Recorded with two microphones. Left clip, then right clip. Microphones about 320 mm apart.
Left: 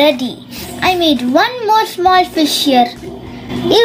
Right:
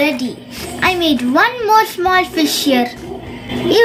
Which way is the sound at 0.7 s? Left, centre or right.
Centre.